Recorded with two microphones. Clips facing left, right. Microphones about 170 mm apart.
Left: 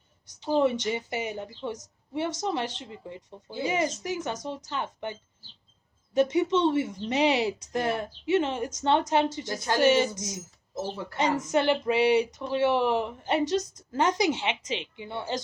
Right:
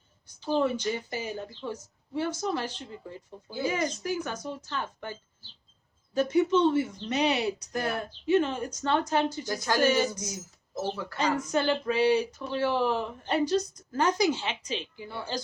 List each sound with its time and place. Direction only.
0.6 s a woman's voice: 20° left (ahead or behind)
6.1 s a woman's voice: 25° left (ahead or behind)